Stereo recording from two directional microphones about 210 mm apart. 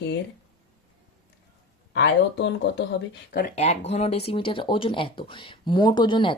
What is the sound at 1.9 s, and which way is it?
Speech, 60° left (ahead or behind).